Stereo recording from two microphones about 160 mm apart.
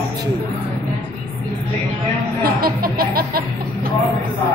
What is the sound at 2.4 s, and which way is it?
Music, 65° right (ahead or behind).